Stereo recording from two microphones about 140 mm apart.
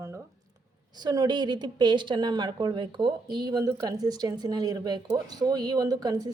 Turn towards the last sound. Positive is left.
turn(degrees=-25)  # may be behind; listen again after turning